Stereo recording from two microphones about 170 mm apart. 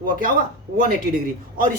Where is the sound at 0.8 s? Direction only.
55° right (ahead or behind).